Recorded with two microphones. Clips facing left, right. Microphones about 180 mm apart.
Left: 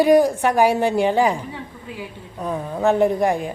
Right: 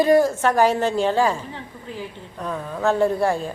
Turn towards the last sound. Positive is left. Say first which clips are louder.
# left 2 dB
turn(degrees=15)  # may be behind; listen again after turning